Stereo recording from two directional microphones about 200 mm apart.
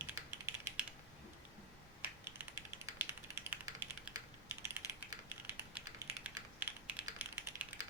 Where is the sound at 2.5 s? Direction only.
15° right (ahead or behind).